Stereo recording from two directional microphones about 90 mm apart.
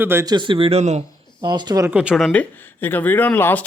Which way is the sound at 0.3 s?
60° right (ahead or behind).